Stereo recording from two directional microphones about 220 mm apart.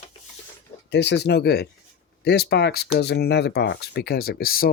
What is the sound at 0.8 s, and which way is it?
Speech, 50° left (ahead or behind).